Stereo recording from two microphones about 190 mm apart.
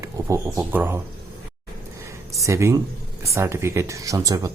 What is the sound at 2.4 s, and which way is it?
Speech, 15° right (ahead or behind).